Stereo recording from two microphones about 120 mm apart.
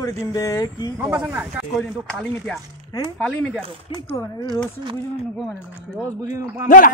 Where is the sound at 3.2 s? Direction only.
10° left (ahead or behind).